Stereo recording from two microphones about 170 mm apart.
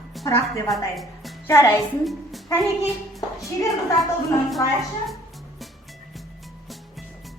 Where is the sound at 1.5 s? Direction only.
15° left (ahead or behind).